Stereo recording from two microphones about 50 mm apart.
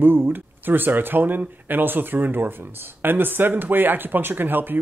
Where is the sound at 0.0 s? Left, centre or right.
Right.